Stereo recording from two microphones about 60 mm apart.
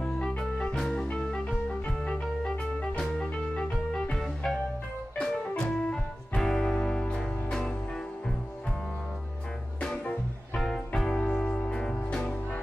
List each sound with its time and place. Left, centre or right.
0.7 s organ: centre
1.1 s music: centre
9.8 s music: centre
10.6 s music: centre